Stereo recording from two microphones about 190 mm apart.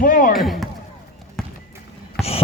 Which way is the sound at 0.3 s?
Centre (ahead or behind).